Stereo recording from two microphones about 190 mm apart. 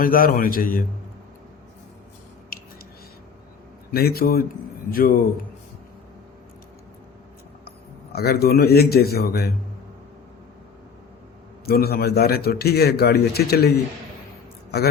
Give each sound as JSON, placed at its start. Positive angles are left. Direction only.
{"t": 0.0, "sound": "a man's voice", "side_deg": 50}
{"t": 3.9, "sound": "a man's voice", "side_deg": 55}
{"t": 8.1, "sound": "a man's voice", "side_deg": 55}
{"t": 11.6, "sound": "a man's voice", "side_deg": 55}